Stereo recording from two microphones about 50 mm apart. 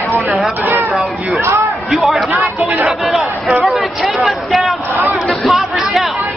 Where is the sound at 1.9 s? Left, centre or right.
Centre.